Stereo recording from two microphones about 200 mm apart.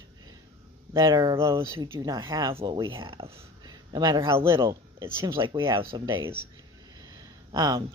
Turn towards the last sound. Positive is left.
turn(degrees=-20)  # may be behind; listen again after turning